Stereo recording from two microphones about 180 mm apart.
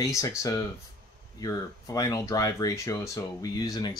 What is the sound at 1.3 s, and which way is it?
Speech, 20° left (ahead or behind).